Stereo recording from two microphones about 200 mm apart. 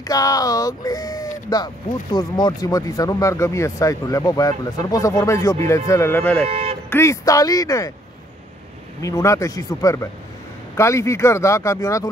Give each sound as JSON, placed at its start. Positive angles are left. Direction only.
{"t": 0.0, "sound": "speech", "side_deg": 20}
{"t": 6.4, "sound": "speech", "side_deg": -30}
{"t": 6.9, "sound": "speech", "side_deg": 15}
{"t": 9.0, "sound": "speech", "side_deg": 15}